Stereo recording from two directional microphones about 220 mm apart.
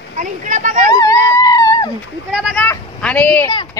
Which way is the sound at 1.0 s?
15° left (ahead or behind).